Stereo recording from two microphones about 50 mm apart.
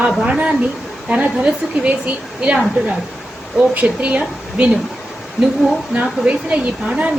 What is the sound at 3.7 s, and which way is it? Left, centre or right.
Speech, right.